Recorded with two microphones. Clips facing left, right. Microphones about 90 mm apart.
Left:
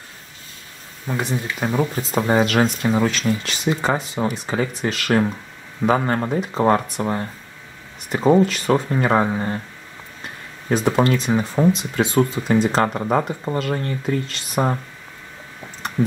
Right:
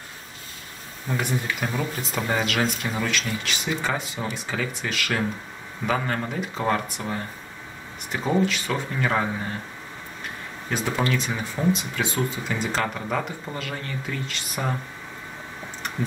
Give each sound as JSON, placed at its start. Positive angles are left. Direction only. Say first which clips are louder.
{"t": 1.0, "sound": "speech", "louder": "left 2 dB", "side_deg": 25}
{"t": 10.7, "sound": "speech", "louder": "left 7 dB", "side_deg": 35}